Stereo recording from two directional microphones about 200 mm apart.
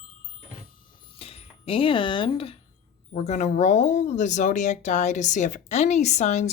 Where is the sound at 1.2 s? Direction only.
30° left (ahead or behind).